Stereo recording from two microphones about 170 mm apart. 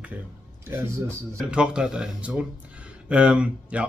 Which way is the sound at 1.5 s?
5° right (ahead or behind).